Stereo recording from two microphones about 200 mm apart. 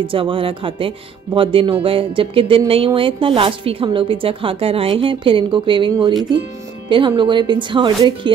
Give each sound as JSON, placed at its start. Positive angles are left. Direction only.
{"t": 0.0, "sound": "speech", "side_deg": -25}